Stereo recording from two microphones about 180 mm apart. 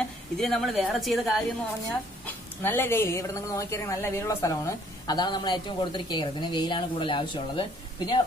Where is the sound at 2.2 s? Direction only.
10° left (ahead or behind).